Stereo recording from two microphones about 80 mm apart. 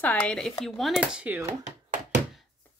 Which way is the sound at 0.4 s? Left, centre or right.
Centre.